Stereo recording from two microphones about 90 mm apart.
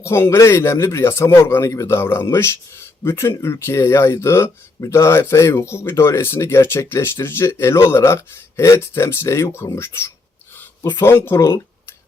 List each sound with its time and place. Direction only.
0.0 s speech: 30° left (ahead or behind)